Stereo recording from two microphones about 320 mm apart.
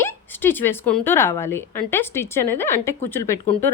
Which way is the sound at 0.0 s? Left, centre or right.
Centre.